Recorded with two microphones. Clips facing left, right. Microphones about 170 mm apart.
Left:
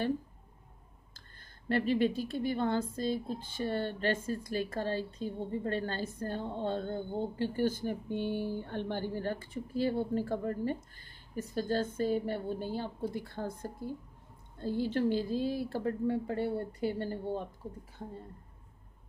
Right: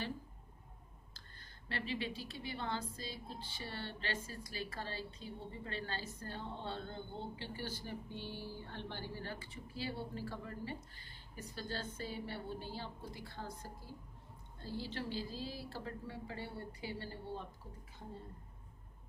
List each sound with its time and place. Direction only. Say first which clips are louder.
1.7 s speech: left 13 dB; 50° left (ahead or behind)